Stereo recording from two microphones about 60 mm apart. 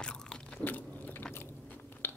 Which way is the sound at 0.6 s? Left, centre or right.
Left.